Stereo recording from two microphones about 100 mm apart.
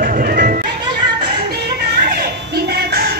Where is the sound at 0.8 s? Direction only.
60° right (ahead or behind).